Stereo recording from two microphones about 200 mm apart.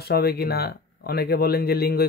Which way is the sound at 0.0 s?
50° left (ahead or behind).